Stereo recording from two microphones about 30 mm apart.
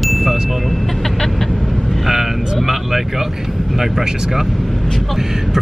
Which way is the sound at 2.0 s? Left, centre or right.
Centre.